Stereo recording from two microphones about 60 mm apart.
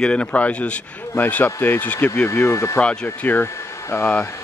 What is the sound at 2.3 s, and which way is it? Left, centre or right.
Speech, left.